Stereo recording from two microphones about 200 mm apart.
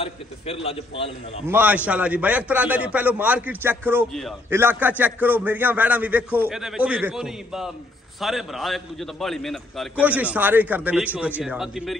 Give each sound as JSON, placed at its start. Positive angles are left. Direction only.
{"t": 0.0, "sound": "a man's voice", "side_deg": 30}
{"t": 1.5, "sound": "a man's voice", "side_deg": -10}
{"t": 4.1, "sound": "a man's voice", "side_deg": 0}
{"t": 4.5, "sound": "a man's voice", "side_deg": -10}